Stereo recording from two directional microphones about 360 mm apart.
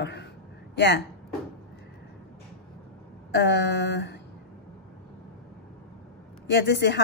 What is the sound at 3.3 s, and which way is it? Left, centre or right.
Speech, left.